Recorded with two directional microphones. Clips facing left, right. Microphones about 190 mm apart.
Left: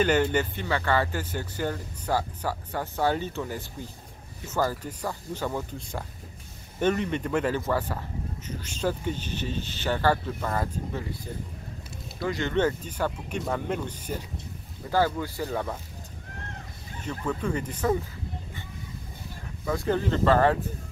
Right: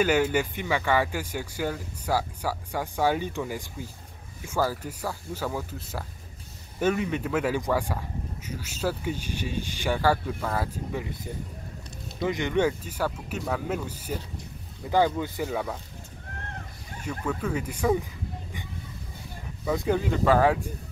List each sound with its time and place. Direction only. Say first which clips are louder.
0.0 s speech: even; 10° right (ahead or behind)
12.2 s speech: right 1 dB; 20° right (ahead or behind)
15.5 s speech: even; 5° right (ahead or behind)
17.3 s speech: even; 5° right (ahead or behind)
19.6 s speech: right 1 dB; 15° right (ahead or behind)